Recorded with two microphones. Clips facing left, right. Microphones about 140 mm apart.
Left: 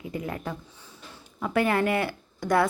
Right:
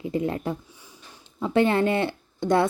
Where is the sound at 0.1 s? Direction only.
30° right (ahead or behind).